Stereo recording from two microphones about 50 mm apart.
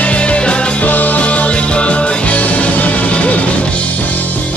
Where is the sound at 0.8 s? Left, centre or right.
Left.